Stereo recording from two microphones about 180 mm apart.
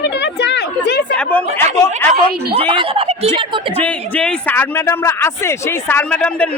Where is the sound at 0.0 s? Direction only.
70° left (ahead or behind).